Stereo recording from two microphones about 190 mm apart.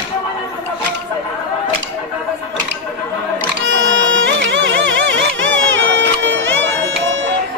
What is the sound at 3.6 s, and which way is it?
Music, 90° right.